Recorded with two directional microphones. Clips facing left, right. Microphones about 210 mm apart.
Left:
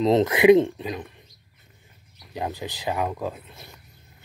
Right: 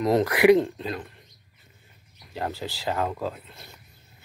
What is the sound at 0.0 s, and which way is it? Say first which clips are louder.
Speech: left 2 dB; 20° left (ahead or behind).